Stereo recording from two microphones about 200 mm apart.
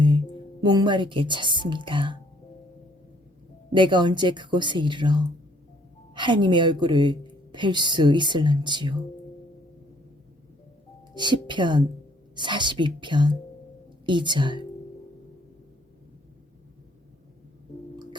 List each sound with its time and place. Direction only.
0.6 s a woman's voice: 20° right (ahead or behind)
3.7 s a woman's voice: 25° right (ahead or behind)
11.1 s a woman's voice: 20° right (ahead or behind)